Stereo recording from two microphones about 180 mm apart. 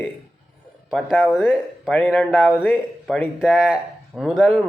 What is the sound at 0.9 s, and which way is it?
Speech, centre (ahead or behind).